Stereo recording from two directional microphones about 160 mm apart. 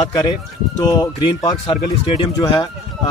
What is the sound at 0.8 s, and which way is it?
Speech, 25° left (ahead or behind).